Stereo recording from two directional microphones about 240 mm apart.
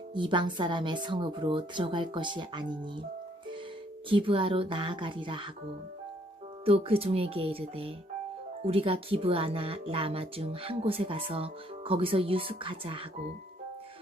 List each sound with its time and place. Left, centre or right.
0.1 s speech: centre
4.1 s speech: right
6.7 s speech: right